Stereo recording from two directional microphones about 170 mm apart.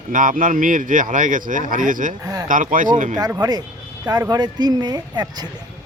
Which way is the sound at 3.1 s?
20° right (ahead or behind).